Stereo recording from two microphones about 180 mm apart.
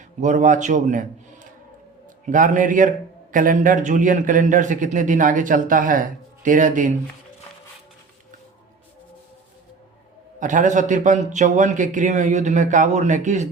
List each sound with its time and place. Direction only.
0.2 s a man's voice: 45° right (ahead or behind)
10.4 s a man's voice: 45° right (ahead or behind)